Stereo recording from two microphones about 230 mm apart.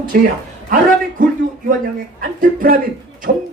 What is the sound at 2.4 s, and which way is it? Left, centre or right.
A man's voice, right.